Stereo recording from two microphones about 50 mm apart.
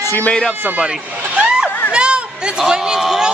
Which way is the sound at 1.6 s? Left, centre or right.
Centre.